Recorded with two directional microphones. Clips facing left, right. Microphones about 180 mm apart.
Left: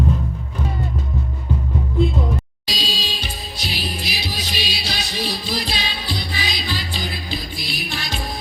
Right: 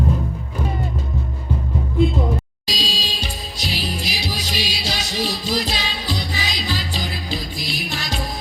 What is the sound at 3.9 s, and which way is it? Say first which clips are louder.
Music: right 2 dB; 40° right (ahead or behind).